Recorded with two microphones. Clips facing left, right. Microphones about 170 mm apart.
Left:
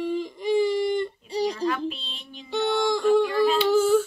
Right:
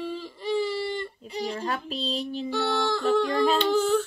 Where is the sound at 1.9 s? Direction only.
40° right (ahead or behind).